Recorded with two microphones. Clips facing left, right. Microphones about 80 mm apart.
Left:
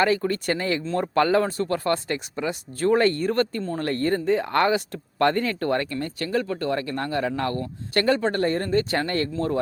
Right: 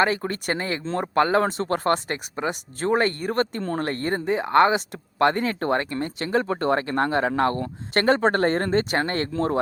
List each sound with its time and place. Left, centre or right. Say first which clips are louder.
0.0 s speech: left 1 dB; right